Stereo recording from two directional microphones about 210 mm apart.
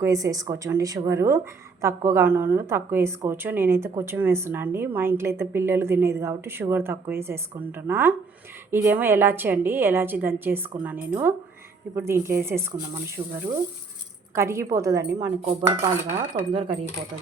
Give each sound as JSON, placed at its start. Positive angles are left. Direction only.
{"t": 0.0, "sound": "a woman's voice", "side_deg": -15}
{"t": 14.3, "sound": "a woman's voice", "side_deg": -15}
{"t": 15.1, "sound": "speech", "side_deg": -5}
{"t": 15.4, "sound": "dishes", "side_deg": -30}
{"t": 16.3, "sound": "speech", "side_deg": -25}